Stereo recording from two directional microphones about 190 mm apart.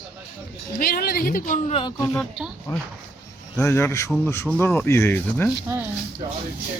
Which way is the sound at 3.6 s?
15° left (ahead or behind).